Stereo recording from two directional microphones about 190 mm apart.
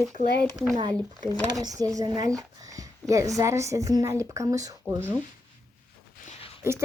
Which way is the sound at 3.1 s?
15° right (ahead or behind).